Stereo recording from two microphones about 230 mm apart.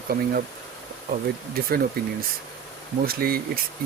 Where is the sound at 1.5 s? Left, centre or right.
Right.